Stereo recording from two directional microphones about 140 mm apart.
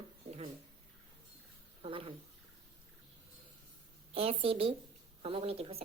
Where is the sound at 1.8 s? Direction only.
40° right (ahead or behind).